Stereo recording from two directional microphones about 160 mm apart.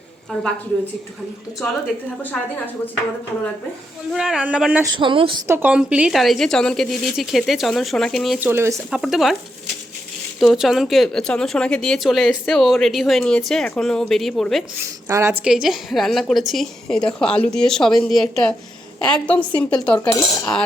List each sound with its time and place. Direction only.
1.6 s a woman's voice: 5° left (ahead or behind)
4.1 s speech: 5° right (ahead or behind)
4.8 s speech: 30° right (ahead or behind)
5.5 s speech: 10° right (ahead or behind)
8.4 s speech: 15° right (ahead or behind)
8.9 s speech: centre (ahead or behind)
10.4 s speech: centre (ahead or behind)
15.0 s speech: 15° right (ahead or behind)
15.4 s a woman's voice: 5° right (ahead or behind)
20.0 s speech: 20° left (ahead or behind)